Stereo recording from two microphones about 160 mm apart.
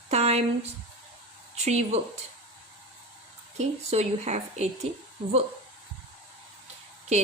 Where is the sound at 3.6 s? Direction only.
45° right (ahead or behind).